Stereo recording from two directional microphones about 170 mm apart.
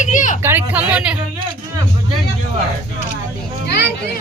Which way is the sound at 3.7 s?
75° left (ahead or behind).